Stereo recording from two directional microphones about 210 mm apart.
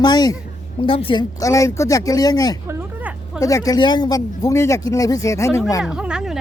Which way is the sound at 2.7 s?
10° right (ahead or behind).